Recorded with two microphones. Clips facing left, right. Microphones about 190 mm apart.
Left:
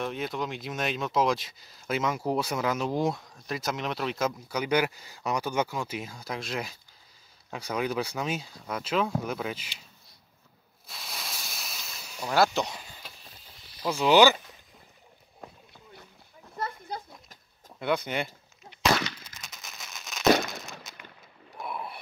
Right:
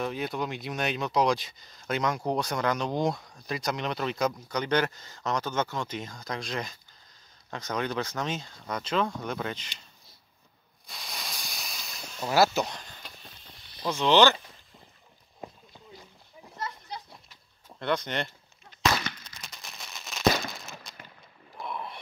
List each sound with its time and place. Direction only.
0.0 s speech: centre (ahead or behind)
10.9 s a sound: centre (ahead or behind)
13.8 s speech: 10° left (ahead or behind)
16.5 s a sound: 55° left (ahead or behind)
17.7 s speech: 5° left (ahead or behind)
19.2 s fireworks: centre (ahead or behind)
21.5 s boat: 5° left (ahead or behind)